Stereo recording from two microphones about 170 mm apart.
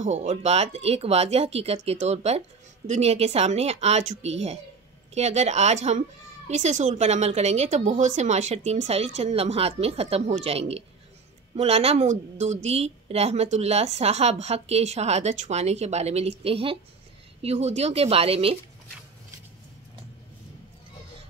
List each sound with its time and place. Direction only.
0.0 s a woman's voice: 45° right (ahead or behind)